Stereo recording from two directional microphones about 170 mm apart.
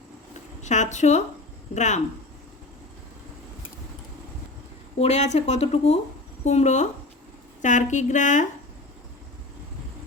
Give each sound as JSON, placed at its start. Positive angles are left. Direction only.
{"t": 0.6, "sound": "a woman's voice", "side_deg": 45}
{"t": 4.9, "sound": "speech", "side_deg": 40}